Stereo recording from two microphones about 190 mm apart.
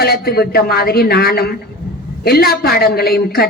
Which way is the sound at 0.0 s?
55° left (ahead or behind).